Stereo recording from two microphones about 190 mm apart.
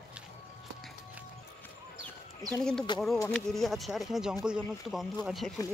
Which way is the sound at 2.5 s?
5° left (ahead or behind).